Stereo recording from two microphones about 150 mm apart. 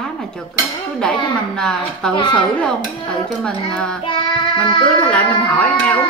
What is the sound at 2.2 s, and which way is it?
Speech, 30° left (ahead or behind).